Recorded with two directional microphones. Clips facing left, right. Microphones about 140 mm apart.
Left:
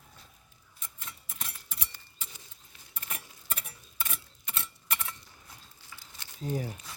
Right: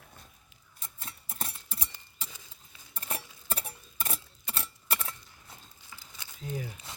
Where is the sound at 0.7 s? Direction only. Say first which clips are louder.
Right 1 dB; 35° right (ahead or behind).